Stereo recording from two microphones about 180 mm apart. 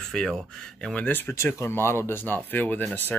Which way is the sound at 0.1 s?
5° left (ahead or behind).